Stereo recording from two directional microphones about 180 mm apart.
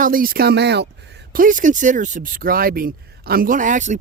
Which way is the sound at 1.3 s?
50° right (ahead or behind).